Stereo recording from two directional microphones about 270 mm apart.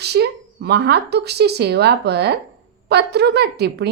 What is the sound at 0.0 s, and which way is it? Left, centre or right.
A woman's voice, right.